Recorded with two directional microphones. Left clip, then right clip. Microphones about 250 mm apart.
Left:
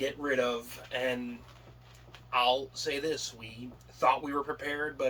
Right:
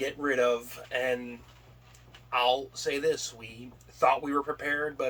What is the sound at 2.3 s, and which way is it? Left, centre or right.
Speech, centre.